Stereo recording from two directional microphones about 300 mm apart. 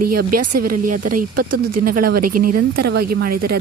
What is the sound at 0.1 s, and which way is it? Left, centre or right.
Speech, right.